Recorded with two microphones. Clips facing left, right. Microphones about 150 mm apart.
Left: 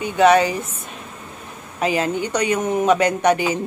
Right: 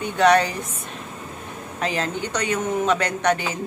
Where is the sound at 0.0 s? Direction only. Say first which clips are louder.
Left 3 dB; 5° left (ahead or behind).